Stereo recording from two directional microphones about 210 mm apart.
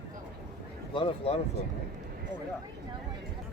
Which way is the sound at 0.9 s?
25° left (ahead or behind).